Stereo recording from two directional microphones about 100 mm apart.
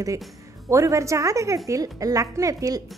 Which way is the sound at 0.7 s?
30° right (ahead or behind).